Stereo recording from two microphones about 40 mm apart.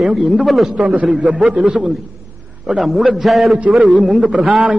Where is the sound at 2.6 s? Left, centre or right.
Centre.